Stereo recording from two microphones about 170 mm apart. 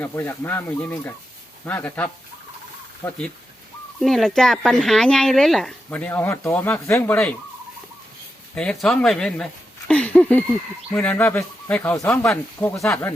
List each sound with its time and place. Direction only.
0.0 s speech: 15° left (ahead or behind)
4.0 s speech: centre (ahead or behind)
8.5 s speech: 5° left (ahead or behind)
9.9 s a sound: 5° left (ahead or behind)
10.9 s speech: 10° left (ahead or behind)